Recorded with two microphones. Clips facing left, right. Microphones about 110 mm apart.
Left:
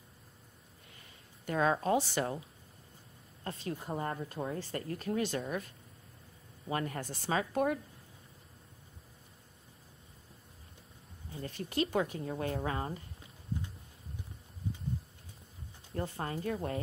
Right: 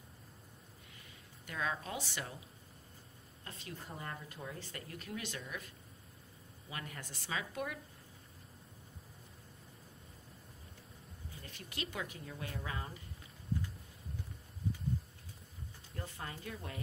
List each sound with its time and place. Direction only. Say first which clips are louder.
1.4 s speech: left 10 dB; 40° left (ahead or behind)
3.4 s speech: left 10 dB; 40° left (ahead or behind)
6.7 s speech: left 11 dB; 40° left (ahead or behind)
11.4 s speech: left 12 dB; 40° left (ahead or behind)
15.9 s speech: left 9 dB; 40° left (ahead or behind)